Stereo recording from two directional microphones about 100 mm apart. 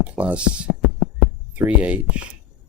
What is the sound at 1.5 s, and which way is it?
Speech, 15° right (ahead or behind).